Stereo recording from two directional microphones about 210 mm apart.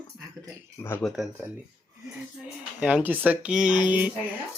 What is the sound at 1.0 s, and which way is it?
Speech, centre (ahead or behind).